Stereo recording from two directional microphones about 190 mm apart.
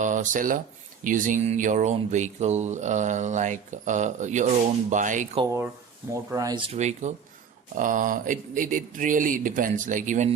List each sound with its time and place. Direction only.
0.0 s speech: 40° right (ahead or behind)
6.3 s speech: 20° right (ahead or behind)
6.7 s speech: 35° right (ahead or behind)